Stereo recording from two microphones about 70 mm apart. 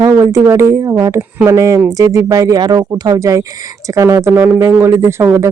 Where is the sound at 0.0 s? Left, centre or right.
Right.